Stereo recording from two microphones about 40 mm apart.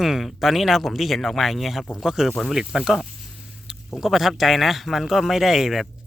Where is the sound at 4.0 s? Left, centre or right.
Centre.